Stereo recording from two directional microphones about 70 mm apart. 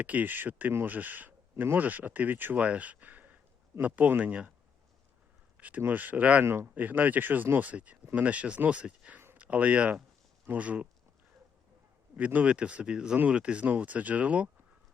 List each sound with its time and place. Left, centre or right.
0.0 s speech: right
5.5 s speech: right
6.4 s speech: right
12.1 s speech: right